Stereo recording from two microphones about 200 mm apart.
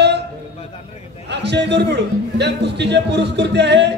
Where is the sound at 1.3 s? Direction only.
60° right (ahead or behind).